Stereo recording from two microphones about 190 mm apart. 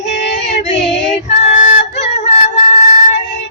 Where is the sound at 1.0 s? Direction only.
40° left (ahead or behind).